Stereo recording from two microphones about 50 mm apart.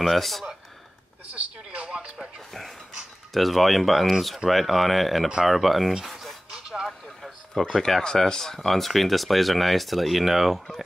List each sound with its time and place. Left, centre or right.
0.0 s speech: centre
1.9 s music: centre
3.3 s speech: centre